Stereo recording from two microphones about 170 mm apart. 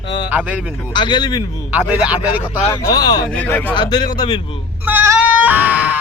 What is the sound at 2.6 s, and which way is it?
Speech, 20° left (ahead or behind).